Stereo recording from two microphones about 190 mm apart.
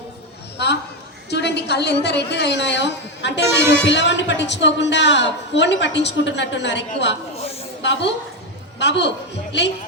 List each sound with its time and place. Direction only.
1.3 s a woman's voice: 60° left (ahead or behind)
7.3 s a sound: 30° left (ahead or behind)
7.8 s a woman's voice: 65° left (ahead or behind)